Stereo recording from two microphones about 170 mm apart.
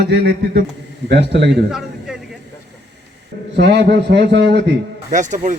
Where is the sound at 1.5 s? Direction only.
5° right (ahead or behind).